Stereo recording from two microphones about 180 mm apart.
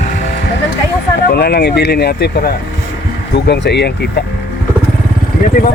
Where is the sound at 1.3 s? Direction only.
60° left (ahead or behind).